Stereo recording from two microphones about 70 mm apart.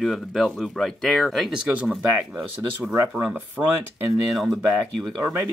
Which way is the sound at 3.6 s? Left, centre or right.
Centre.